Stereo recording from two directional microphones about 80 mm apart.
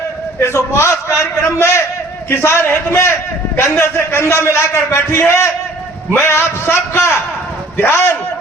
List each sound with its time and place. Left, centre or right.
0.3 s a man's voice: left